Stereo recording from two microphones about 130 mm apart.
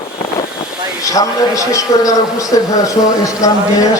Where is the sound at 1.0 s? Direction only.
25° left (ahead or behind).